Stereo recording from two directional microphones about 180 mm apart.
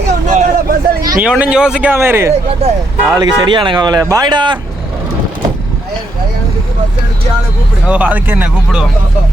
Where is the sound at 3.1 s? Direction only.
25° right (ahead or behind).